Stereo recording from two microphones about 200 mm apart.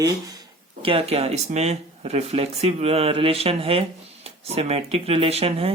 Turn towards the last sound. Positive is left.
turn(degrees=-30)  # may be behind; listen again after turning